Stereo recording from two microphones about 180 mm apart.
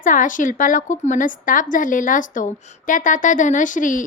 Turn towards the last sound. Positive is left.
turn(degrees=45)  # may be behind; listen again after turning